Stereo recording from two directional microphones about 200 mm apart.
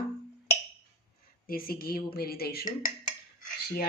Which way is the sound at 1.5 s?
50° left (ahead or behind).